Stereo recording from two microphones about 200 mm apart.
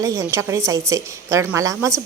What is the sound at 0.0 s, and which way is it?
A woman's voice, 15° right (ahead or behind).